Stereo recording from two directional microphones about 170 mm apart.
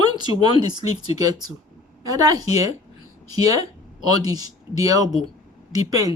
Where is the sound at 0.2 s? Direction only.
25° right (ahead or behind).